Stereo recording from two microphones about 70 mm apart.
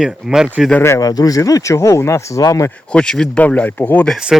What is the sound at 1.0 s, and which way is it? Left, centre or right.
Speech, left.